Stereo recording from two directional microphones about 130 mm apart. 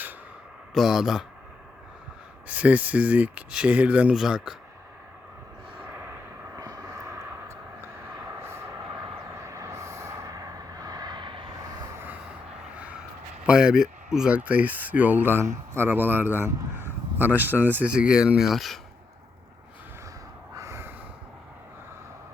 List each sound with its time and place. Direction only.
0.7 s speech: centre (ahead or behind)
2.5 s speech: 10° right (ahead or behind)
6.6 s vehicle: 25° right (ahead or behind)
13.4 s speech: 5° right (ahead or behind)
20.6 s crow: 20° right (ahead or behind)